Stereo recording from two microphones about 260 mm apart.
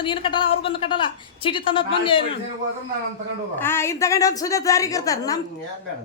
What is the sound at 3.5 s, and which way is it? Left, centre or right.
A woman's voice, centre.